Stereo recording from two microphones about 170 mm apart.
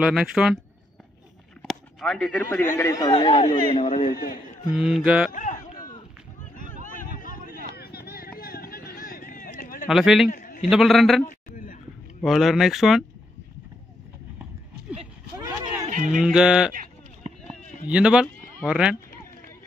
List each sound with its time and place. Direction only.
0.0 s speech: 5° right (ahead or behind)
1.6 s speech: centre (ahead or behind); by 4.1 s 30° left (ahead or behind)
4.1 s a man's voice: 60° left (ahead or behind)
4.7 s speech: 5° right (ahead or behind)
5.3 s a sound: 45° left (ahead or behind)
9.8 s speech: centre (ahead or behind)
10.3 s a sound: 55° left (ahead or behind)
10.7 s speech: centre (ahead or behind)
11.2 s a sound: 50° left (ahead or behind)
12.2 s speech: centre (ahead or behind)
15.9 s a sound: 50° right (ahead or behind)
16.2 s speech: 5° right (ahead or behind)
17.8 s speech: 5° right (ahead or behind)